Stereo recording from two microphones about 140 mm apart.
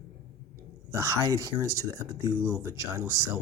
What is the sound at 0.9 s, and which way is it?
Speech, 20° right (ahead or behind).